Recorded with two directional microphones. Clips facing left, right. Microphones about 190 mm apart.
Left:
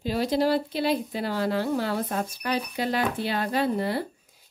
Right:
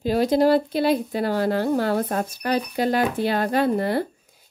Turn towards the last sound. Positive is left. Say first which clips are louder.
# right 5 dB
turn(degrees=-55)  # may be behind; listen again after turning